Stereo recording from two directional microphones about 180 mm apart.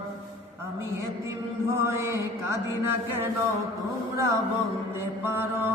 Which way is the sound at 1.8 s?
15° right (ahead or behind).